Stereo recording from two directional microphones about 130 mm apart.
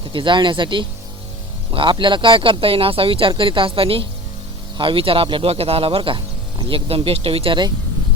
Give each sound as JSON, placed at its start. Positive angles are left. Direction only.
{"t": 0.1, "sound": "speech", "side_deg": -40}